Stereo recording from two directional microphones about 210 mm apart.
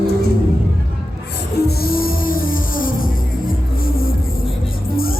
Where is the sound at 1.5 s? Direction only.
50° left (ahead or behind).